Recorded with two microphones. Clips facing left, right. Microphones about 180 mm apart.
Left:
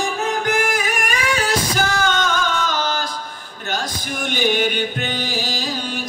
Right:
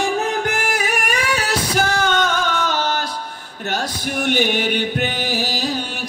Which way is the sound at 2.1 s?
65° right (ahead or behind).